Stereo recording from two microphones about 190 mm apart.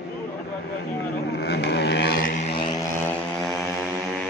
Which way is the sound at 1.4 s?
60° left (ahead or behind).